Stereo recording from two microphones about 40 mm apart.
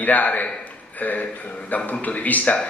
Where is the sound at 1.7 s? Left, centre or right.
Left.